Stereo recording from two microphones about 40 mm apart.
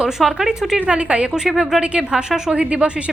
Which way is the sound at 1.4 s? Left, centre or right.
Centre.